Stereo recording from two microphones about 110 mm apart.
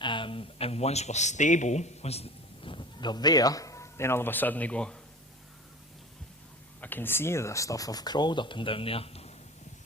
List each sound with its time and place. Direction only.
0.0 s speech: 50° left (ahead or behind); by 4.9 s 10° left (ahead or behind)
6.8 s speech: 20° left (ahead or behind); by 9.3 s 65° left (ahead or behind)